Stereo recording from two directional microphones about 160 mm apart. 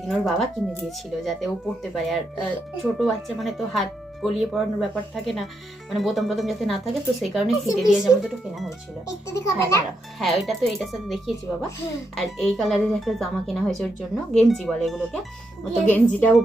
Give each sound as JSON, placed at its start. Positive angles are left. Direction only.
{"t": 0.1, "sound": "speech", "side_deg": 0}
{"t": 9.2, "sound": "a child's voice", "side_deg": 20}
{"t": 10.2, "sound": "a woman's voice", "side_deg": 0}